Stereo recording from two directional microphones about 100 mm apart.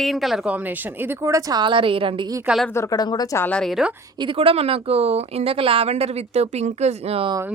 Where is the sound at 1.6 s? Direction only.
60° right (ahead or behind).